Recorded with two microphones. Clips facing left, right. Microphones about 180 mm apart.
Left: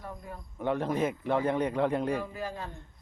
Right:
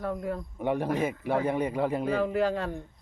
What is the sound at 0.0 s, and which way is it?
Speech, 75° right (ahead or behind).